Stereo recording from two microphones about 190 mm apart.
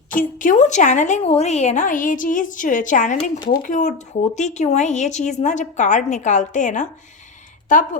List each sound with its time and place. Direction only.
0.1 s speech: 45° left (ahead or behind)